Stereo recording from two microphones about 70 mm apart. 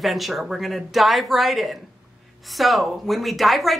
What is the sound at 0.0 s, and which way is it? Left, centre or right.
Speech, centre.